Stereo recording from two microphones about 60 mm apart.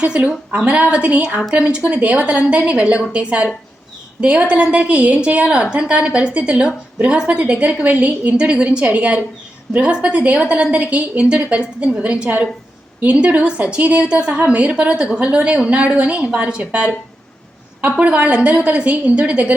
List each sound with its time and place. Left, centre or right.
0.0 s a woman's voice: centre
17.9 s a woman's voice: right